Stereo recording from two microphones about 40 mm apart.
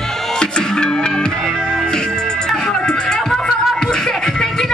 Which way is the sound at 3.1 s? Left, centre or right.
Centre.